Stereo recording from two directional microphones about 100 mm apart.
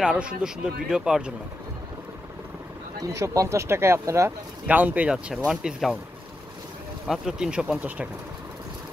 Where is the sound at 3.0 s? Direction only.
35° right (ahead or behind).